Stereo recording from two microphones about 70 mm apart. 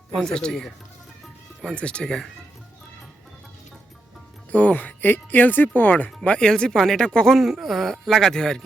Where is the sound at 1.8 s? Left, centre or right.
Centre.